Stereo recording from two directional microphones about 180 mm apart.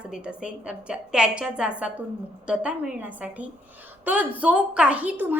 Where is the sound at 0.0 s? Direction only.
5° right (ahead or behind).